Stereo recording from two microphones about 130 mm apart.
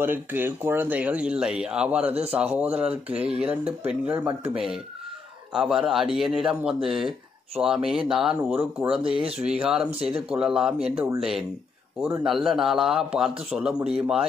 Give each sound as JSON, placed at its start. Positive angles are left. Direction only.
{"t": 0.0, "sound": "a man's voice", "side_deg": -15}
{"t": 8.4, "sound": "speech", "side_deg": -15}
{"t": 8.7, "sound": "a man's voice", "side_deg": -5}